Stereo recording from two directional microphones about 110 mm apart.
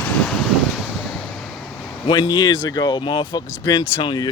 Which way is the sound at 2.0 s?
40° left (ahead or behind).